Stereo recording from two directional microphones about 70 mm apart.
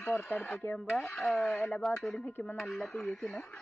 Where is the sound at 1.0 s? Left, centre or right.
Centre.